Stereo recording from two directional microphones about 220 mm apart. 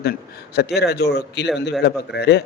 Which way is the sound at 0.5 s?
50° left (ahead or behind).